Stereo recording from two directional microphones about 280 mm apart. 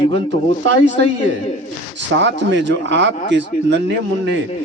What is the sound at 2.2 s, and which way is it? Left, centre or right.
A man's voice, right.